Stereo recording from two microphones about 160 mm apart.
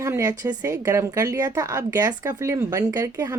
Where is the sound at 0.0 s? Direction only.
20° right (ahead or behind).